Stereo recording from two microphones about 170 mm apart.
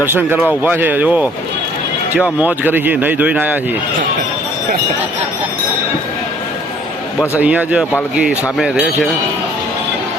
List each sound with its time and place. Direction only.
0.0 s speech: 10° right (ahead or behind)
2.4 s speech: 10° right (ahead or behind)
7.3 s speech: 10° right (ahead or behind)